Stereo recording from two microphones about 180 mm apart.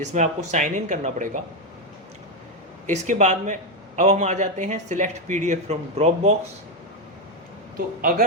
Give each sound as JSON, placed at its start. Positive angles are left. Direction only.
{"t": 0.0, "sound": "speech", "side_deg": -40}
{"t": 2.8, "sound": "a man's voice", "side_deg": -40}